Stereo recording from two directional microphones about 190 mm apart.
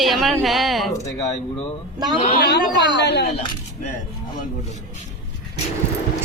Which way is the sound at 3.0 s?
60° left (ahead or behind).